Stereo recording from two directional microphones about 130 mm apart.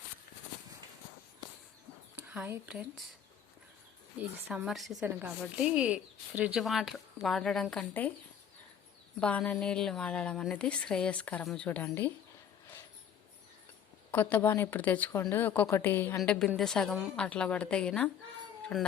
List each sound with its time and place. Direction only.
2.5 s speech: 10° right (ahead or behind)
4.2 s speech: 10° right (ahead or behind); by 8.1 s 10° left (ahead or behind)
9.2 s a woman's voice: 10° left (ahead or behind)
14.1 s a woman's voice: 15° left (ahead or behind)